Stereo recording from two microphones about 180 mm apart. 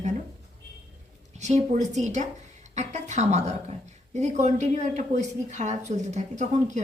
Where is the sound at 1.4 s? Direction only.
40° right (ahead or behind).